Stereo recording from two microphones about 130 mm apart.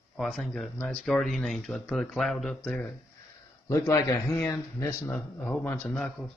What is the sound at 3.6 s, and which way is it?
Speech, 25° left (ahead or behind).